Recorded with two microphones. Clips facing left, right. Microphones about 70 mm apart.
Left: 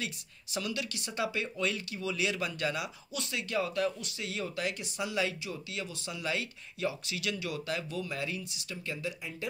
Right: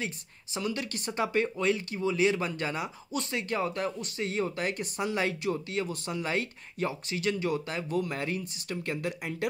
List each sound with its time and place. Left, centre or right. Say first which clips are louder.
0.0 s speech: right 3 dB; right